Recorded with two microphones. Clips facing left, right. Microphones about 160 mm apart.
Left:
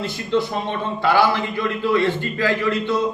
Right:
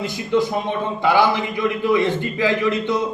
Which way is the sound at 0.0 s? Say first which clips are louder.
Right 2 dB; 15° right (ahead or behind).